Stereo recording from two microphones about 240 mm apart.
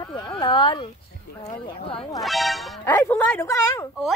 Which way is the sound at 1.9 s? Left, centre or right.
Centre.